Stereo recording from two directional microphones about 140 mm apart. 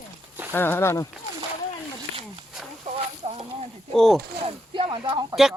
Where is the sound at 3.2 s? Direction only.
40° right (ahead or behind).